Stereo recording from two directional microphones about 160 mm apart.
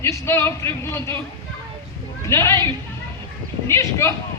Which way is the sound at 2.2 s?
20° left (ahead or behind).